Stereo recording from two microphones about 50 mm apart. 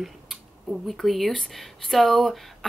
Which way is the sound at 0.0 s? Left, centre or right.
Centre.